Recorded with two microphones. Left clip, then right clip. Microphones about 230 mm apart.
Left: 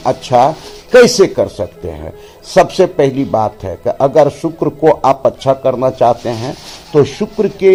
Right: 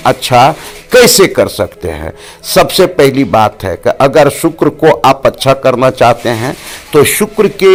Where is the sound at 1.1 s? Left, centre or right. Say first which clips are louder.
Right 4 dB; centre.